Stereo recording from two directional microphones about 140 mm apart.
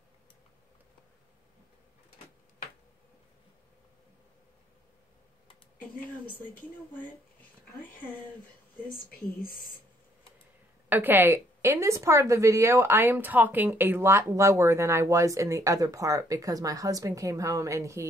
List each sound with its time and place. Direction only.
10.9 s a woman's voice: 15° right (ahead or behind)